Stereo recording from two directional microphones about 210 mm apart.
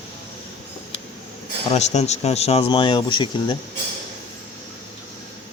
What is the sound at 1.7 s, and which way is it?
Speech, 30° left (ahead or behind).